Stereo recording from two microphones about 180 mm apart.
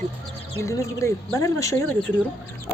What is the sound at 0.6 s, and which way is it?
Speech, 15° left (ahead or behind).